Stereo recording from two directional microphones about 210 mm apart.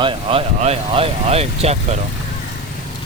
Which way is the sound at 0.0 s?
25° right (ahead or behind).